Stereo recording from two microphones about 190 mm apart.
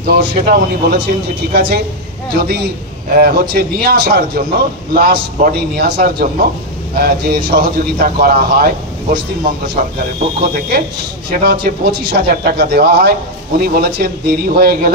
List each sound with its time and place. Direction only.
0.0 s speech: 55° right (ahead or behind)
3.1 s a man's voice: 50° right (ahead or behind)
9.8 s a man's voice: 45° right (ahead or behind)